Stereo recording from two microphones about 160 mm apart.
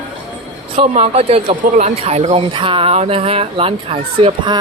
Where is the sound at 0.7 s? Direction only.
40° right (ahead or behind).